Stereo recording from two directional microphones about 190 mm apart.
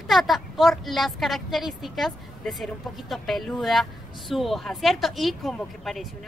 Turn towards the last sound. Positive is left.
turn(degrees=0)  # may be behind; listen again after turning